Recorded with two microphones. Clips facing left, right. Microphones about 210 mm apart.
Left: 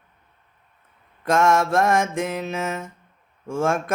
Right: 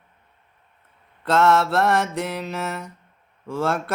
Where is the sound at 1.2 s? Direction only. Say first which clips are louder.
Right 1 dB; 15° left (ahead or behind).